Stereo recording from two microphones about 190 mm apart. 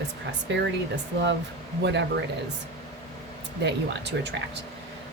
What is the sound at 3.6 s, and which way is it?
Speech, 65° right (ahead or behind).